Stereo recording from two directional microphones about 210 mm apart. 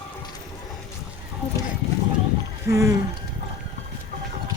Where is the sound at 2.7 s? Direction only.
15° right (ahead or behind).